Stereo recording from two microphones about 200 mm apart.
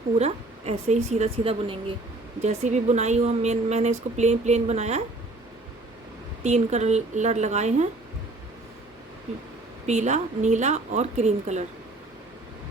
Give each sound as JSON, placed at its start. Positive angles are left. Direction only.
{"t": 0.2, "sound": "a woman's voice", "side_deg": -30}
{"t": 6.4, "sound": "a woman's voice", "side_deg": -35}
{"t": 9.8, "sound": "a woman's voice", "side_deg": -35}